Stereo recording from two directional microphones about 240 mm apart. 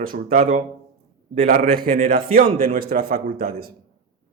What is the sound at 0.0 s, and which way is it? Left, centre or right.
A man's voice, right.